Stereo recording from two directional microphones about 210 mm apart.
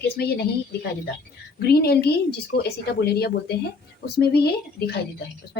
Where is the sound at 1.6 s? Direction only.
50° left (ahead or behind).